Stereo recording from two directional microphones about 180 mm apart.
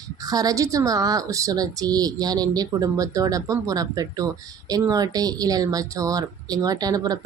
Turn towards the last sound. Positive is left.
turn(degrees=-20)  # may be behind; listen again after turning